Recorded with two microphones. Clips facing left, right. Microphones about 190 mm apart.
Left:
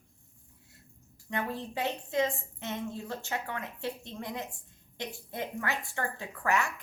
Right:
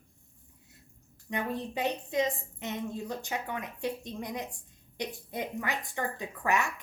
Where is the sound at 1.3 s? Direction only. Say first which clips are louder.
Right 1 dB; 15° right (ahead or behind).